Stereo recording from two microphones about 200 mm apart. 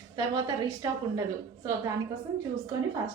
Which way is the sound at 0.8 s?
20° right (ahead or behind).